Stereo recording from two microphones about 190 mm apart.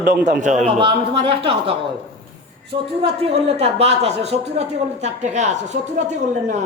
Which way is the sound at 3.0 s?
30° right (ahead or behind).